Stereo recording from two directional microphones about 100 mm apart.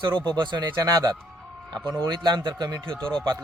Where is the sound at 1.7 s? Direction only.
45° right (ahead or behind).